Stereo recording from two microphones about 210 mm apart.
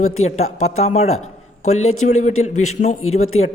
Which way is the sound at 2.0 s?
35° left (ahead or behind).